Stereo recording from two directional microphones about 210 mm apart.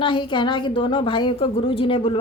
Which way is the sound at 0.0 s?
20° left (ahead or behind).